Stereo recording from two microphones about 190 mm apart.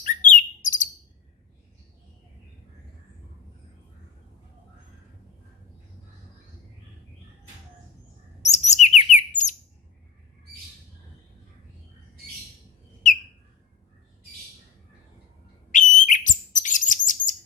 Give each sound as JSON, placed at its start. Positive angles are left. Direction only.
{"t": 0.0, "sound": "chirp", "side_deg": 40}
{"t": 8.4, "sound": "chirp", "side_deg": 35}
{"t": 13.0, "sound": "whistle", "side_deg": 40}
{"t": 15.7, "sound": "bird", "side_deg": 40}